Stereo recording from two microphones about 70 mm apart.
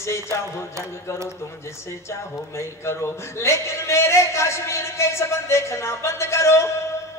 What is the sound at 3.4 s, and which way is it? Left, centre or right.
A man's voice, left.